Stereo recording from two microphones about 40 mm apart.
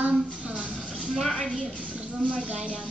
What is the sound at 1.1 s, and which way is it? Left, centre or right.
Speech, centre.